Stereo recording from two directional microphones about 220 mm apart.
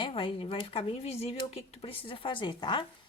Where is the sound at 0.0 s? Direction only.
25° left (ahead or behind).